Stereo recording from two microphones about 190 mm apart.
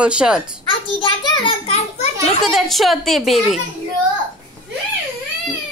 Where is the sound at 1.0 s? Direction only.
25° left (ahead or behind).